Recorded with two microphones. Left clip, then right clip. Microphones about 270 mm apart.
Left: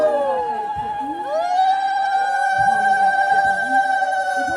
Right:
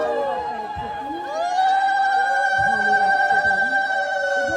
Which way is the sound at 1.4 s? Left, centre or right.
Left.